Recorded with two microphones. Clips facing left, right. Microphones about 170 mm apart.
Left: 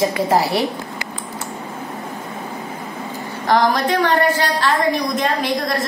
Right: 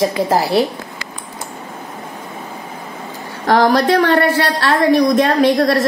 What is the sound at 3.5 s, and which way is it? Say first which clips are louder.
A woman's voice: right 4 dB; 60° right (ahead or behind).